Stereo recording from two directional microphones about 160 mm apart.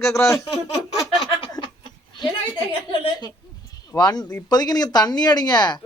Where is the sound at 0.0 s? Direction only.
20° left (ahead or behind).